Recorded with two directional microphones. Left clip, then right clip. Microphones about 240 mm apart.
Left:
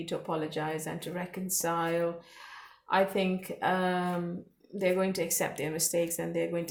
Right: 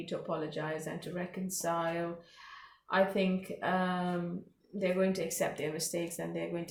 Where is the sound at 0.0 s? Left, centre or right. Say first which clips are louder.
Left 3 dB; left.